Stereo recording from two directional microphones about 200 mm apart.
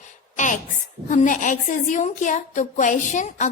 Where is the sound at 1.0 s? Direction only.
40° left (ahead or behind).